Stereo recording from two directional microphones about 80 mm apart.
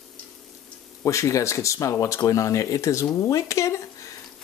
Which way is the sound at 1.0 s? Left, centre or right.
Left.